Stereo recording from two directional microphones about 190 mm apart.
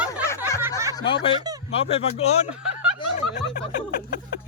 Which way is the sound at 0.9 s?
25° left (ahead or behind).